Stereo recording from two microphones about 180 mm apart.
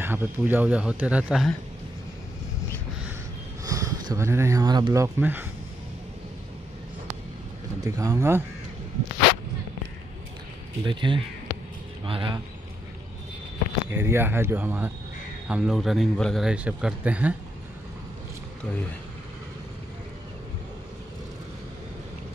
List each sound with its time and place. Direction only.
0.0 s speech: 10° right (ahead or behind)
3.6 s speech: 20° right (ahead or behind)
7.8 s speech: 20° right (ahead or behind)
10.8 s speech: 25° right (ahead or behind)
13.8 s a man's voice: 10° right (ahead or behind)